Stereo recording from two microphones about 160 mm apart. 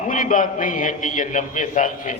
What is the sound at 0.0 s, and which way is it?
A man's voice, 55° left (ahead or behind).